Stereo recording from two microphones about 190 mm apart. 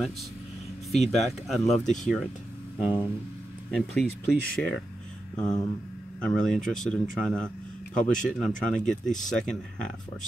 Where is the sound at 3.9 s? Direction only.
55° left (ahead or behind).